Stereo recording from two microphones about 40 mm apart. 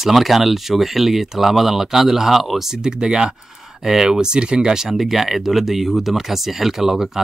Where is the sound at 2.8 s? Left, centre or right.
Centre.